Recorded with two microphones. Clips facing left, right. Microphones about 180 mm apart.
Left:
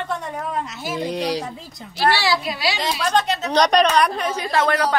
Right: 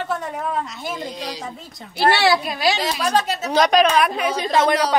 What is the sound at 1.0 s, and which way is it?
Speech, 65° left (ahead or behind).